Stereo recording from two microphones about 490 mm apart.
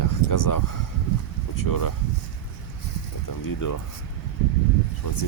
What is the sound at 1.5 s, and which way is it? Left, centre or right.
Speech, left.